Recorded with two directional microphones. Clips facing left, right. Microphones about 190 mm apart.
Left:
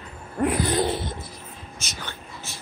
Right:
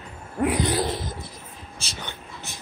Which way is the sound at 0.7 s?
Centre (ahead or behind).